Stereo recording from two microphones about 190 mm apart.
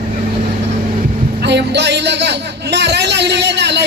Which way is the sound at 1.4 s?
65° right (ahead or behind).